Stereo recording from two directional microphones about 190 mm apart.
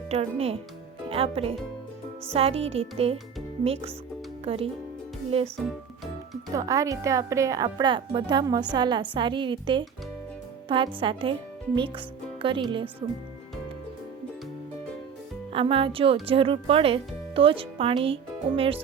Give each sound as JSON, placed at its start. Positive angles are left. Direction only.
{"t": 0.1, "sound": "music", "side_deg": -35}
{"t": 6.5, "sound": "speech", "side_deg": -15}
{"t": 15.5, "sound": "speech", "side_deg": -30}